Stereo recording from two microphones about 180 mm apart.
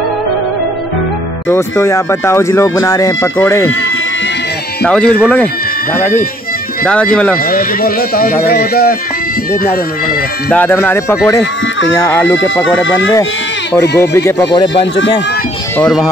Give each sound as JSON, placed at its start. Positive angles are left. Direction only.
{"t": 1.5, "sound": "speech", "side_deg": 15}
{"t": 4.8, "sound": "speech", "side_deg": 5}
{"t": 7.5, "sound": "speech", "side_deg": 55}
{"t": 10.5, "sound": "speech", "side_deg": 10}
{"t": 13.7, "sound": "speech", "side_deg": 15}
{"t": 15.8, "sound": "speech", "side_deg": 0}